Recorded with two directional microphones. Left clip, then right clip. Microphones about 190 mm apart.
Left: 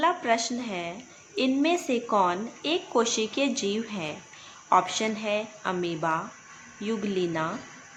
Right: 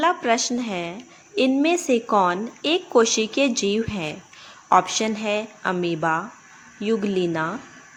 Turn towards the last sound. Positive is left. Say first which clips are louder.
# right 5 dB
turn(degrees=-30)  # may be behind; listen again after turning